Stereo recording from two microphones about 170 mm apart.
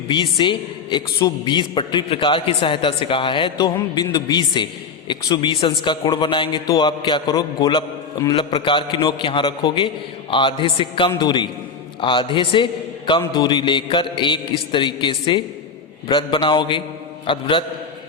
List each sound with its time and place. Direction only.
0.1 s a man's voice: 30° left (ahead or behind)